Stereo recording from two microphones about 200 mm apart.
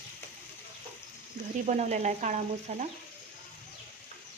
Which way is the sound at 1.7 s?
35° right (ahead or behind).